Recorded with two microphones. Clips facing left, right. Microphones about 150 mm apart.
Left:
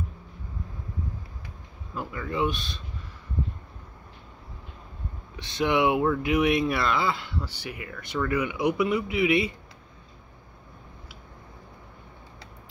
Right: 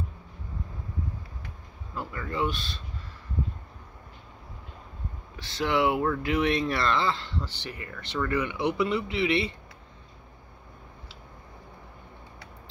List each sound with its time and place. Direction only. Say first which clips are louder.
2.0 s speech: left 2 dB; 10° left (ahead or behind)
5.3 s speech: left 2 dB; 20° left (ahead or behind)